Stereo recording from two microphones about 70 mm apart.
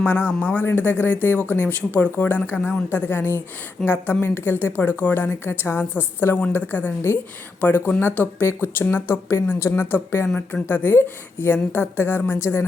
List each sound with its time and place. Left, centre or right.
0.0 s speech: left